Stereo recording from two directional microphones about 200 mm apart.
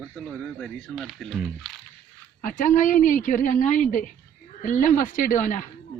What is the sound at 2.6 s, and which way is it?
A woman's voice, 40° left (ahead or behind).